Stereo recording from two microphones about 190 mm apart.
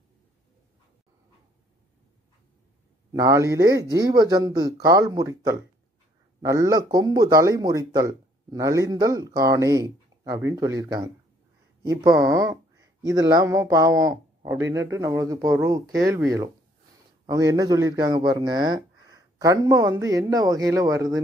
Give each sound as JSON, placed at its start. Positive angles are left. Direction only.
{"t": 3.1, "sound": "speech", "side_deg": -15}